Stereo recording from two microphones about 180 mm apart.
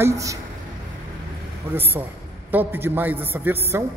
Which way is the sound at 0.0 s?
15° right (ahead or behind).